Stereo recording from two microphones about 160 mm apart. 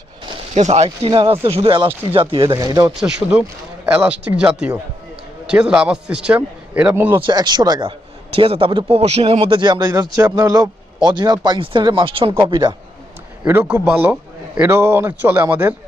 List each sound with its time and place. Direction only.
0.5 s speech: 45° right (ahead or behind)
0.9 s speech: 30° right (ahead or behind)
2.6 s a man's voice: 20° right (ahead or behind)
3.0 s a man's voice: 5° right (ahead or behind)
7.2 s a man's voice: 30° right (ahead or behind)
13.4 s speech: 10° right (ahead or behind)